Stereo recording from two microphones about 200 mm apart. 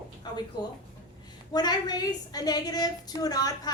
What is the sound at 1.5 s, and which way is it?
A woman's voice, 20° left (ahead or behind).